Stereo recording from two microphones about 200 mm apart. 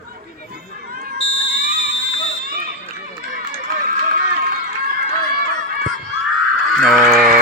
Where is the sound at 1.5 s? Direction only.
45° right (ahead or behind).